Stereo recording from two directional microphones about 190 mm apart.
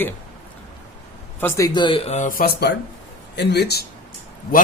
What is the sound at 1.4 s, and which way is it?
Speech, 15° left (ahead or behind).